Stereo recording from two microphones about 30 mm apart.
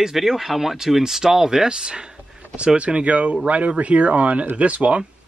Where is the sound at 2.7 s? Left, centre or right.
Right.